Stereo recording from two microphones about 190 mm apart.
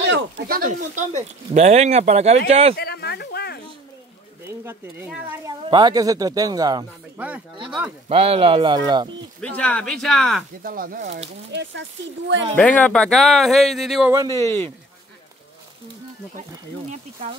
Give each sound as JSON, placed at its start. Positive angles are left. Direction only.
{"t": 0.0, "sound": "speech", "side_deg": -55}
{"t": 2.8, "sound": "a sound", "side_deg": 55}
{"t": 4.6, "sound": "speech", "side_deg": -10}
{"t": 5.7, "sound": "speech", "side_deg": -20}
{"t": 7.2, "sound": "speech", "side_deg": -10}
{"t": 8.1, "sound": "speech", "side_deg": -30}
{"t": 9.4, "sound": "speech", "side_deg": 5}
{"t": 10.6, "sound": "speech", "side_deg": -45}
{"t": 12.5, "sound": "speech", "side_deg": 5}
{"t": 14.1, "sound": "speech", "side_deg": -15}
{"t": 14.4, "sound": "speech", "side_deg": 10}